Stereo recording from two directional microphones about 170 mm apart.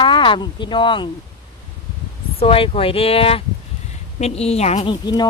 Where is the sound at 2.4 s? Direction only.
35° left (ahead or behind).